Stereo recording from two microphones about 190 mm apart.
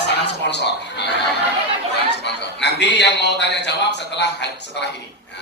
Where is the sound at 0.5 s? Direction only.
65° left (ahead or behind).